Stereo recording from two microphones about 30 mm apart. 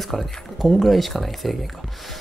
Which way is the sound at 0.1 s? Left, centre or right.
Centre.